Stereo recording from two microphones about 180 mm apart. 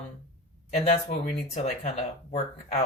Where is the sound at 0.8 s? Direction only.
35° left (ahead or behind).